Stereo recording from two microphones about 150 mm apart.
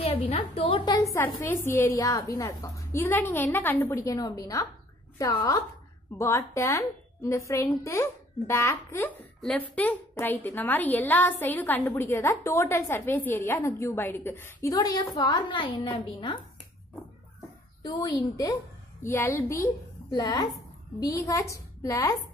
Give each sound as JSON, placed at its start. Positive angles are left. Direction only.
{"t": 0.0, "sound": "a woman's voice", "side_deg": 40}
{"t": 1.1, "sound": "a woman's voice", "side_deg": 20}
{"t": 17.8, "sound": "a woman's voice", "side_deg": 30}
{"t": 19.0, "sound": "a woman's voice", "side_deg": 15}